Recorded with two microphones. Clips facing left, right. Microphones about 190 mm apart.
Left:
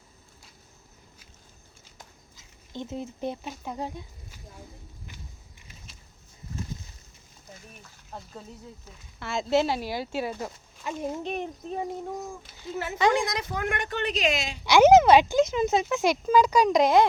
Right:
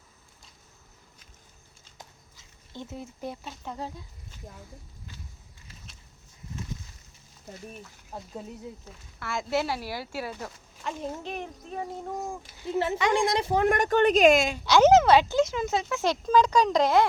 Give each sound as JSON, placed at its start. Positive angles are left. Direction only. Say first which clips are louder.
{"t": 2.7, "sound": "speech", "louder": "left 5 dB", "side_deg": 20}
{"t": 8.1, "sound": "speech", "louder": "right 2 dB", "side_deg": -10}
{"t": 9.1, "sound": "speech", "louder": "left 4 dB", "side_deg": 25}
{"t": 12.7, "sound": "a woman's voice", "louder": "left 1 dB", "side_deg": -30}
{"t": 14.6, "sound": "speech", "louder": "left 4 dB", "side_deg": 15}